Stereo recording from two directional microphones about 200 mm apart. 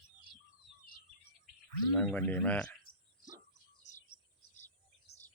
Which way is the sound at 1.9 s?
5° left (ahead or behind).